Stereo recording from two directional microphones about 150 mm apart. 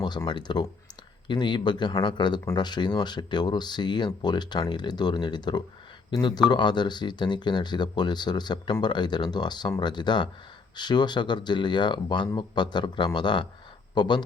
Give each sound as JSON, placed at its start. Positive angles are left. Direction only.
{"t": 0.3, "sound": "speech", "side_deg": 30}